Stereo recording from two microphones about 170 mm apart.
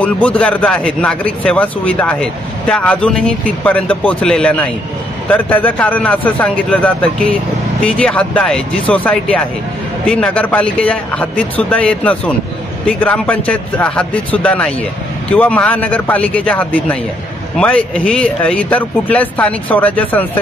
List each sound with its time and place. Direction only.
0.0 s speech: 10° left (ahead or behind)